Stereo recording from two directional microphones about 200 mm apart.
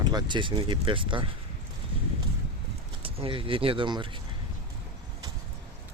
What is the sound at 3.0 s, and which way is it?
Speech, 25° right (ahead or behind).